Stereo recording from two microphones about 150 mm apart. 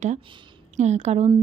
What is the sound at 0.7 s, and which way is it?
Speech, 50° right (ahead or behind).